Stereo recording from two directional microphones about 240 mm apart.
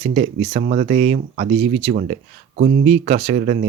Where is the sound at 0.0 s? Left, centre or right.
Right.